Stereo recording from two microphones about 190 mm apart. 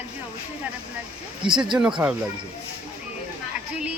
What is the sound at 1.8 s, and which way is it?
Speech, 5° right (ahead or behind).